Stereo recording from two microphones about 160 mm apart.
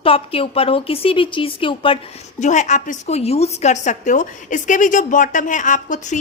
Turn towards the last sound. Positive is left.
turn(degrees=50)  # may be behind; listen again after turning